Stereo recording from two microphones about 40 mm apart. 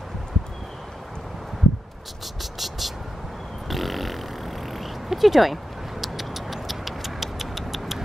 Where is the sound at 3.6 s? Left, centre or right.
Centre.